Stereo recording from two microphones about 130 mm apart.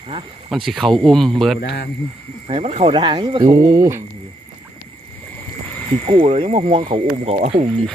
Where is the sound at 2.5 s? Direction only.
50° right (ahead or behind).